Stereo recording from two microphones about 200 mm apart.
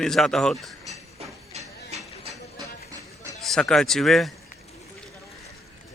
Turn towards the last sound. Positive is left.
turn(degrees=0)  # may be behind; listen again after turning